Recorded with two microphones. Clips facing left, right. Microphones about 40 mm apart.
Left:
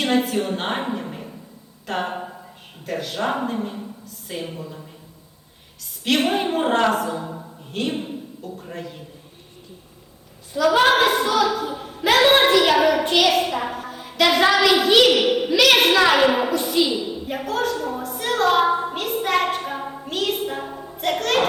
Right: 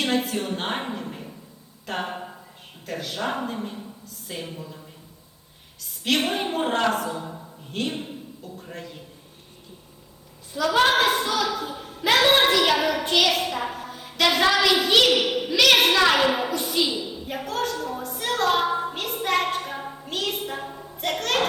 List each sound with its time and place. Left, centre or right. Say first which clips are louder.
0.0 s a woman's voice: left 4 dB; centre
6.1 s a woman's voice: left 4 dB; centre
10.5 s a sound: left 4 dB; centre
13.1 s a woman's voice: left 3 dB; centre
15.2 s a sound: left 5 dB; centre
15.5 s a woman's voice: left 2 dB; centre
20.1 s a man's voice: left 5 dB; centre